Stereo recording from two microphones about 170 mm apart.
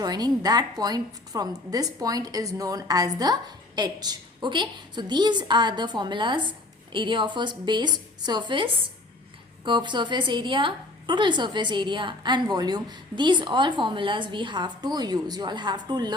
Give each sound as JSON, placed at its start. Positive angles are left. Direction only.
{"t": 0.0, "sound": "a woman's voice", "side_deg": -25}